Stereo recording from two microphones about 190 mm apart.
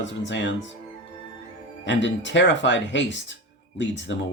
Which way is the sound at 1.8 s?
70° left (ahead or behind).